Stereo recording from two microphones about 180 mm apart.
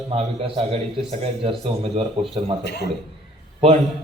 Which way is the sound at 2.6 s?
65° left (ahead or behind).